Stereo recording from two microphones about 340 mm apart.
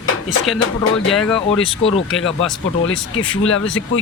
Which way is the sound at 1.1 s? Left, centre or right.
Centre.